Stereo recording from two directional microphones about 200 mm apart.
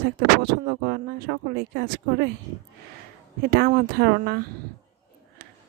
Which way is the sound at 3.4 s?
50° right (ahead or behind).